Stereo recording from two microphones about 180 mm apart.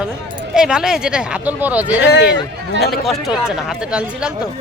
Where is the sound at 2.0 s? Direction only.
70° left (ahead or behind).